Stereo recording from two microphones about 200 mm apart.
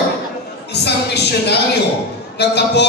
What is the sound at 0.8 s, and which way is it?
Speech, 55° left (ahead or behind).